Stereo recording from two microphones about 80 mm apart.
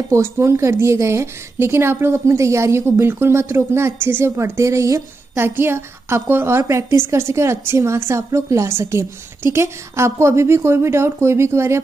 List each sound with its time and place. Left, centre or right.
0.1 s a woman's voice: right